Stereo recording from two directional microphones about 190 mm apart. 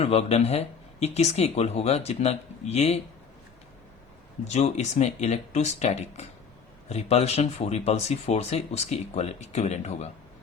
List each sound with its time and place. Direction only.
0.0 s speech: 35° left (ahead or behind)
4.5 s speech: 35° left (ahead or behind)